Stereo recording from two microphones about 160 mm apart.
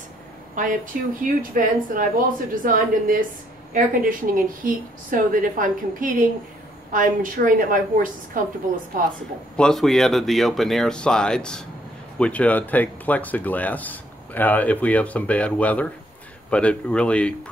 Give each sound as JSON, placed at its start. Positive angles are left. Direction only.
{"t": 0.6, "sound": "a woman's voice", "side_deg": -55}
{"t": 9.6, "sound": "speech", "side_deg": 0}